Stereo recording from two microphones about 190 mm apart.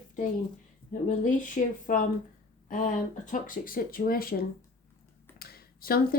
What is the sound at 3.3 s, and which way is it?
Speech, 45° left (ahead or behind).